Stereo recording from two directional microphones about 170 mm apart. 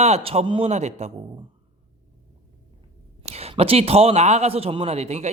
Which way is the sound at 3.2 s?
35° right (ahead or behind).